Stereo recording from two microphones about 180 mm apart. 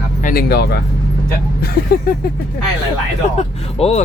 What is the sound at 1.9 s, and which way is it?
Speech, 60° left (ahead or behind).